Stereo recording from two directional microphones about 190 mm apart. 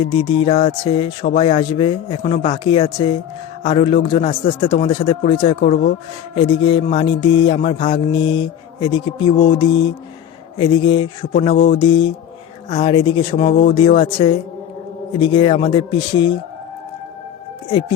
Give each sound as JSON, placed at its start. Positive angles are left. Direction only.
{"t": 0.0, "sound": "music", "side_deg": 25}
{"t": 17.7, "sound": "speech", "side_deg": 25}